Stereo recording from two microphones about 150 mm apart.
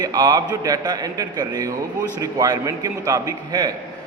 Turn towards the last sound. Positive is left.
turn(degrees=-25)  # may be behind; listen again after turning